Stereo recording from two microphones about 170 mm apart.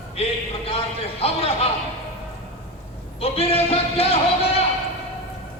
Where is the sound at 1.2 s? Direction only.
35° left (ahead or behind).